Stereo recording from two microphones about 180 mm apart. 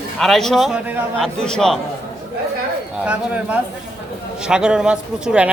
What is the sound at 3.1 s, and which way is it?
Speech, 5° right (ahead or behind).